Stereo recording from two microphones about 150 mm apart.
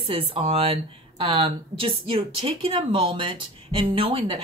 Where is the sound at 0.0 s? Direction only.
40° right (ahead or behind).